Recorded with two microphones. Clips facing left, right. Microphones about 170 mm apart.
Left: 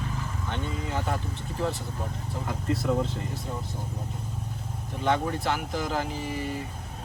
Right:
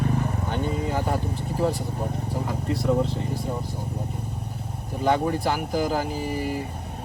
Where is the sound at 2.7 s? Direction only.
Centre (ahead or behind).